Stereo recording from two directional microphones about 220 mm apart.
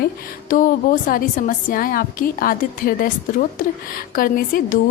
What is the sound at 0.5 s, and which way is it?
A woman's voice, 35° left (ahead or behind).